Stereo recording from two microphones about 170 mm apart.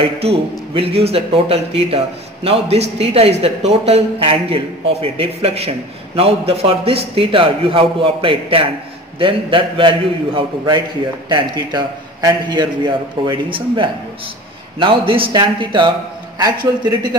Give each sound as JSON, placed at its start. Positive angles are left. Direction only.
{"t": 0.2, "sound": "a man's voice", "side_deg": -35}